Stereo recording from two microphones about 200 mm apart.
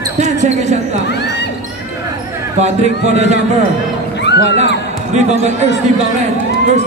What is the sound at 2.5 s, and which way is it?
Speech, 35° right (ahead or behind).